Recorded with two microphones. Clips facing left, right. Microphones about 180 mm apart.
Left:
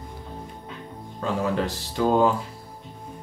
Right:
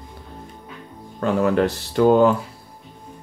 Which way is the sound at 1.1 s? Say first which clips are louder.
Right 6 dB; 60° right (ahead or behind).